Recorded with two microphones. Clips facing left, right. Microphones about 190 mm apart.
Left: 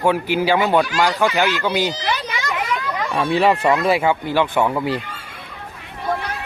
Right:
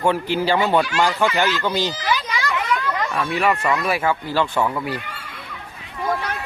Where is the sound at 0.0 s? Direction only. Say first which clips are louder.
Left 2 dB; 10° left (ahead or behind).